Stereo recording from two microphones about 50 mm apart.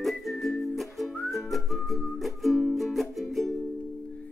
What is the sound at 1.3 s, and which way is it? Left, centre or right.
Music, centre.